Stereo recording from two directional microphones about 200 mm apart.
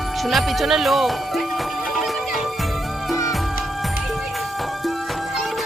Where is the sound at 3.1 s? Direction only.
15° left (ahead or behind).